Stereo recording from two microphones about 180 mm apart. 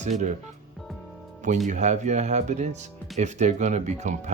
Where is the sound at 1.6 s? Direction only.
40° right (ahead or behind).